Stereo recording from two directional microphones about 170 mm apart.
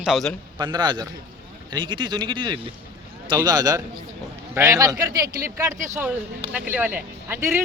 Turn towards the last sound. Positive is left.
turn(degrees=-15)  # may be behind; listen again after turning